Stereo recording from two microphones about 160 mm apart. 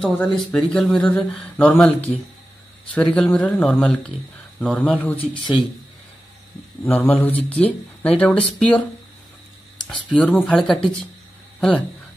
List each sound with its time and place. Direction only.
0.1 s speech: 10° left (ahead or behind)
5.2 s speech: 30° left (ahead or behind)
6.8 s speech: 10° left (ahead or behind)
9.8 s speech: 10° left (ahead or behind)